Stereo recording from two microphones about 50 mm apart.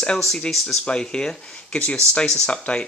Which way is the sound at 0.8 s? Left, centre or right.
Centre.